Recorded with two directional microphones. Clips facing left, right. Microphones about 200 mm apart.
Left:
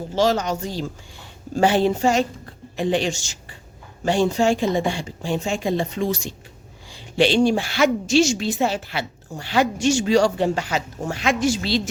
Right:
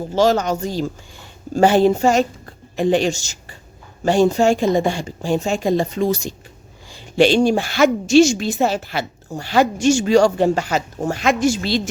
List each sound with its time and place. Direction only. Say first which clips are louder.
0.1 s a woman's voice: right 4 dB; 45° right (ahead or behind)